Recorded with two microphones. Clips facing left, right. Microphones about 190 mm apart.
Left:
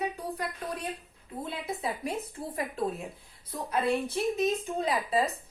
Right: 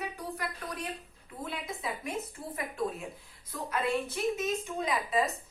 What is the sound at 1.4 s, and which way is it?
A woman's voice, 30° left (ahead or behind).